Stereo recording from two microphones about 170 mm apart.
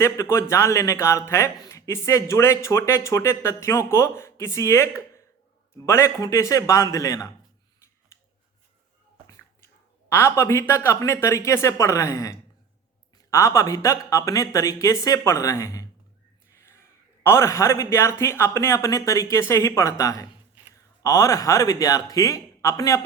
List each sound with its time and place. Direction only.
0.0 s a man's voice: 15° left (ahead or behind)
10.1 s a man's voice: 15° left (ahead or behind)
16.6 s a sound: 15° left (ahead or behind)
17.2 s a man's voice: 15° left (ahead or behind)